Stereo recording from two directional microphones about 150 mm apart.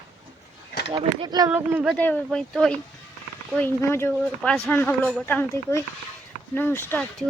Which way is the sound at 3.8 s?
15° left (ahead or behind).